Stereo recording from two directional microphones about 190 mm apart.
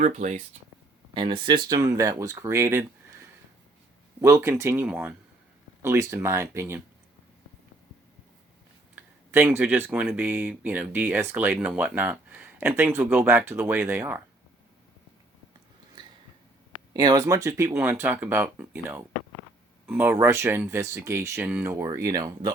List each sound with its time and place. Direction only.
0.0 s speech: 40° right (ahead or behind)
1.1 s speech: 25° right (ahead or behind)
9.0 s speech: 10° right (ahead or behind)
16.9 s speech: 20° right (ahead or behind)